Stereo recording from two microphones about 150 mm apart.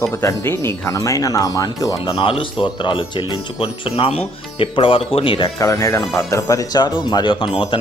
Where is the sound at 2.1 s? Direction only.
35° left (ahead or behind).